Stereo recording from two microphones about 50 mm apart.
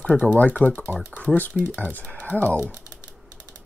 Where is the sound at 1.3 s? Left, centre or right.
Centre.